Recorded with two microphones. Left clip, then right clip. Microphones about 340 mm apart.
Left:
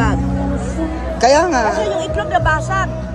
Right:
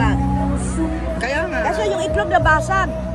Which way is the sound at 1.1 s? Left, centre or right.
Centre.